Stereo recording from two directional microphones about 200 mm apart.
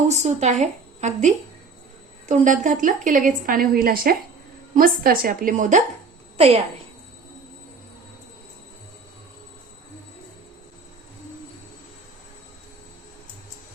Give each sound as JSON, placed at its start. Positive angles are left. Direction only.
{"t": 0.1, "sound": "a woman's voice", "side_deg": -35}